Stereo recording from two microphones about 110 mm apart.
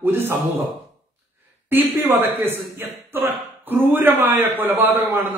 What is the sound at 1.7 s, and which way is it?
A man's voice, 20° right (ahead or behind).